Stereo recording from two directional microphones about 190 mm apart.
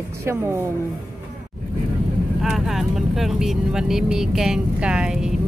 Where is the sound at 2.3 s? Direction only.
Centre (ahead or behind).